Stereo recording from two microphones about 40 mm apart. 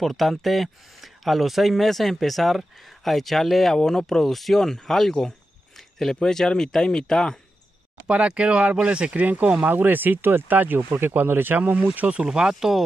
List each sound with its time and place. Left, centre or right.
0.0 s speech: centre
5.8 s cricket: centre
6.1 s speech: centre
8.1 s speech: right
9.6 s speech: right
10.9 s speech: right
12.2 s speech: centre